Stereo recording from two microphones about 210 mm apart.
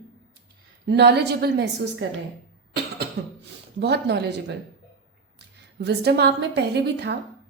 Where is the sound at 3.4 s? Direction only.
55° right (ahead or behind).